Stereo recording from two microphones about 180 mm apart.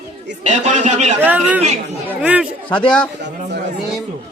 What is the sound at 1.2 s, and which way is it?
A woman's voice, 10° right (ahead or behind).